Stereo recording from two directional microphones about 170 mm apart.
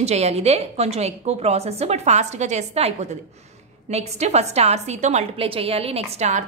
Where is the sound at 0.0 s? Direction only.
40° right (ahead or behind).